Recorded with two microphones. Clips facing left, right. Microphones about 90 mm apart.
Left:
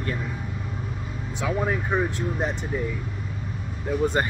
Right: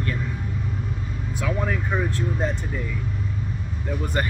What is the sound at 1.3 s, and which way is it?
Speech, 15° left (ahead or behind).